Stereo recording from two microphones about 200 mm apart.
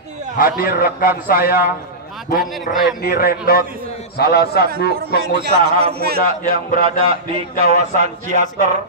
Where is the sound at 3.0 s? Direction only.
50° left (ahead or behind).